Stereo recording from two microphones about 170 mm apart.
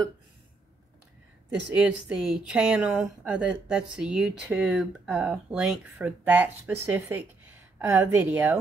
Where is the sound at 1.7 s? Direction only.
5° right (ahead or behind).